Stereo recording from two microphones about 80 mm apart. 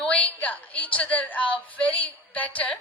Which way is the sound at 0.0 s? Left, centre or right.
Centre.